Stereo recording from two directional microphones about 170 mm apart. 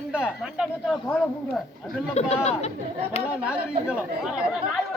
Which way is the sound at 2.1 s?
40° left (ahead or behind).